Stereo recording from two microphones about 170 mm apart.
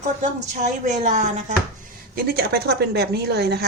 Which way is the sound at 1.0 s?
45° right (ahead or behind).